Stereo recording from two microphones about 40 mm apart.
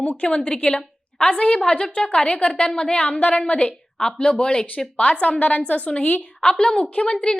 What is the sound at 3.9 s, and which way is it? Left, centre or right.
Speech, centre.